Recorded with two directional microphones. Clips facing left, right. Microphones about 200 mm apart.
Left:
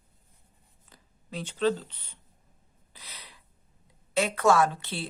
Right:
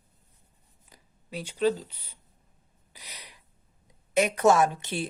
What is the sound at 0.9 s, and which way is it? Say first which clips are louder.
Speech: right 1 dB; 10° right (ahead or behind).